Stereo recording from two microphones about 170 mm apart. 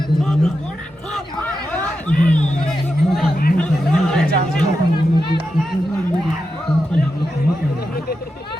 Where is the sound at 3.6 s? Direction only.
5° left (ahead or behind).